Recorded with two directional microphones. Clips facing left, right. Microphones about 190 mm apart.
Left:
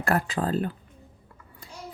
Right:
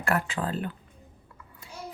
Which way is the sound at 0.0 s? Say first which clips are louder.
Left 3 dB; 35° left (ahead or behind).